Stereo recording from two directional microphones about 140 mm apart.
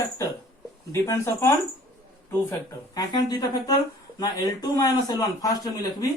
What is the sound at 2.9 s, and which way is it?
Speech, 30° left (ahead or behind).